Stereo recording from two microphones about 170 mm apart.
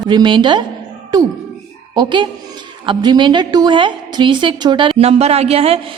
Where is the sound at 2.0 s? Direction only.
30° right (ahead or behind).